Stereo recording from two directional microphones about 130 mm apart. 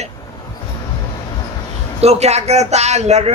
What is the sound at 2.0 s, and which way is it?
Speech, 55° right (ahead or behind).